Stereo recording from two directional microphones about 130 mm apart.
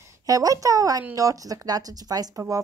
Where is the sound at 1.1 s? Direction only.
25° right (ahead or behind).